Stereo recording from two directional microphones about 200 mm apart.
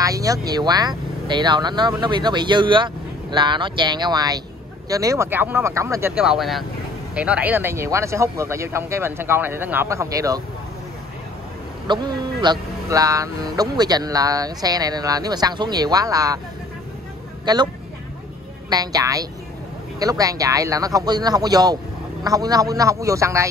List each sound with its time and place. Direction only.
0.0 s speech: 15° right (ahead or behind)
11.9 s speech: 20° right (ahead or behind)
17.5 s speech: 20° right (ahead or behind)
18.7 s speech: 20° right (ahead or behind)